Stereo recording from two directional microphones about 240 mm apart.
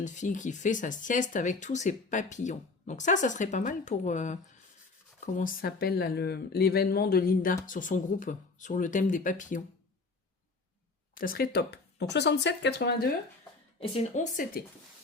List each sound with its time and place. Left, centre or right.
0.0 s speech: left
11.1 s speech: left
13.9 s speech: left